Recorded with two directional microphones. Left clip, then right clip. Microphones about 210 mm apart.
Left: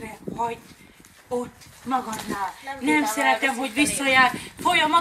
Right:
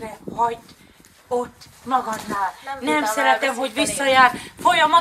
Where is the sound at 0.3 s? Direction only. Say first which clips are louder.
Right 5 dB; 30° left (ahead or behind).